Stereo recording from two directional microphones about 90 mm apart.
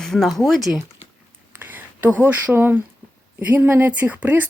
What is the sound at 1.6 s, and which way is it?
Speech, 20° right (ahead or behind).